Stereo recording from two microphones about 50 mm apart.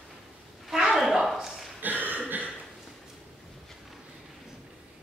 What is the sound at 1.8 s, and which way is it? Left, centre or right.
Cough, right.